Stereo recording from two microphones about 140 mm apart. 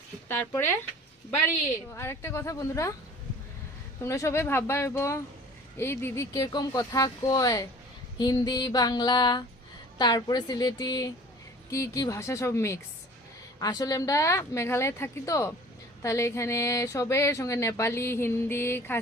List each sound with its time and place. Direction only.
2.0 s speech: 20° left (ahead or behind)
4.0 s speech: 20° left (ahead or behind)